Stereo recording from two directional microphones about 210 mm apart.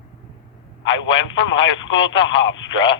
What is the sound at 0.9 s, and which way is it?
Speech, 65° left (ahead or behind).